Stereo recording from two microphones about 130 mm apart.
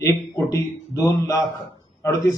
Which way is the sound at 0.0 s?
15° left (ahead or behind).